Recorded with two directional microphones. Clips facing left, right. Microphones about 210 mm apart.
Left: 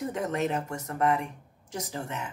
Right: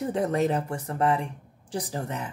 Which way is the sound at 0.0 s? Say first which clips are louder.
Right 4 dB; 35° right (ahead or behind).